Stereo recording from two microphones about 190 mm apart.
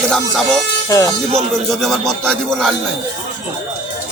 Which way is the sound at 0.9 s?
15° left (ahead or behind).